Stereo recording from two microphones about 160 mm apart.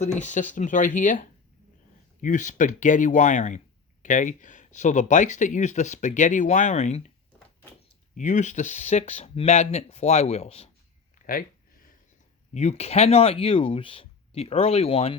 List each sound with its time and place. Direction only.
0.2 s speech: 50° left (ahead or behind)
2.2 s speech: 50° left (ahead or behind)
8.1 s speech: 50° left (ahead or behind)
11.2 s a sound: 55° left (ahead or behind)
12.5 s speech: 45° left (ahead or behind)